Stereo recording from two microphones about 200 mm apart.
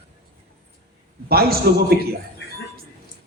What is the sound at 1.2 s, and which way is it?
Speech, 50° right (ahead or behind).